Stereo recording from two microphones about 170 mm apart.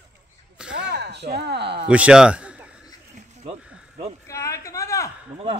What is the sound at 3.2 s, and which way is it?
Snake, 40° right (ahead or behind).